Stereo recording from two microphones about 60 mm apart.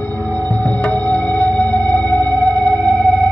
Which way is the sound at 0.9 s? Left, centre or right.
Left.